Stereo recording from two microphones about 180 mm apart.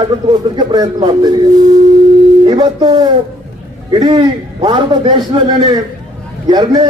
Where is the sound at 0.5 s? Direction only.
25° right (ahead or behind).